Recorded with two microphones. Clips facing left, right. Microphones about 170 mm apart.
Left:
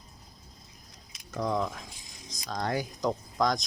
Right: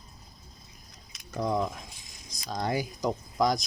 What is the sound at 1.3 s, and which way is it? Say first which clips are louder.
Speech: right 1 dB; 15° right (ahead or behind).